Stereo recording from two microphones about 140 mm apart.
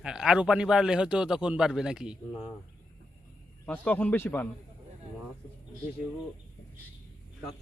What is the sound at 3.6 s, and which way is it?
Speech, 10° left (ahead or behind).